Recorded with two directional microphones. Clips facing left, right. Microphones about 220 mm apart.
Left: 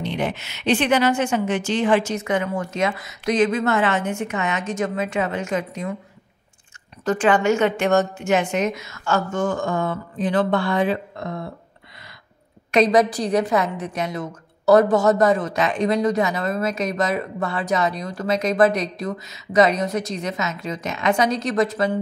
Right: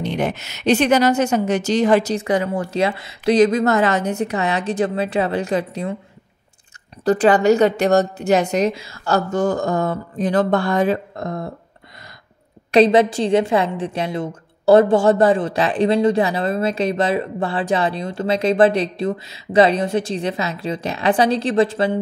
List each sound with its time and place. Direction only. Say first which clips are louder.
0.0 s a woman's voice: right 3 dB; 45° right (ahead or behind)
7.1 s a woman's voice: right 4 dB; 35° right (ahead or behind)
12.7 s a woman's voice: right 4 dB; 30° right (ahead or behind)